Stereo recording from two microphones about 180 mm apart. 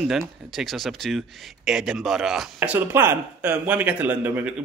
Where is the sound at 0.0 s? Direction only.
Centre (ahead or behind).